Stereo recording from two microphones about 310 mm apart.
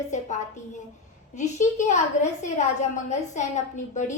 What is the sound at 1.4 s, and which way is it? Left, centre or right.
Speech, left.